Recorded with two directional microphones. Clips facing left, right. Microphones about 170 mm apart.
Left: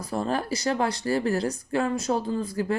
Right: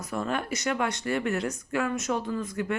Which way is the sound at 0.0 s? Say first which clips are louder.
Left 3 dB; 30° left (ahead or behind).